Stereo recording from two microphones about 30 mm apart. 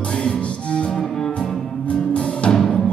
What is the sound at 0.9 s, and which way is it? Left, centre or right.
Music, centre.